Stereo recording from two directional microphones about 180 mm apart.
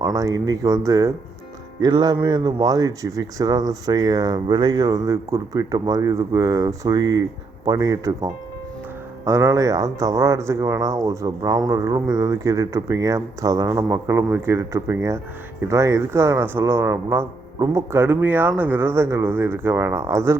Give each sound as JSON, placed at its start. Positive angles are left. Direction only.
{"t": 0.0, "sound": "speech", "side_deg": -20}